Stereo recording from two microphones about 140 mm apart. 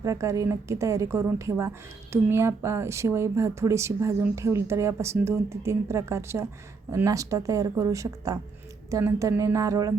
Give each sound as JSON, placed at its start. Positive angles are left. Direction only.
{"t": 0.0, "sound": "speech", "side_deg": -20}